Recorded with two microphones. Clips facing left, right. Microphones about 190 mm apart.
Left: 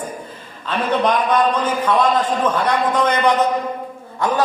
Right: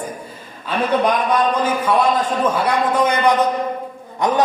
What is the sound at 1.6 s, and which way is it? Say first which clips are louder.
A man's voice: even; 10° right (ahead or behind).